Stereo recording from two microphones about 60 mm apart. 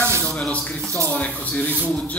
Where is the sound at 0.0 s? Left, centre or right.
Right.